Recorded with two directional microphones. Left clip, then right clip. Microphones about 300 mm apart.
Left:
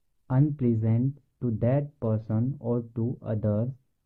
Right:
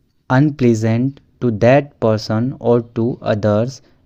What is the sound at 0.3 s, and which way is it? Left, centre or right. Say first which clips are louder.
Speech: right 13 dB; right.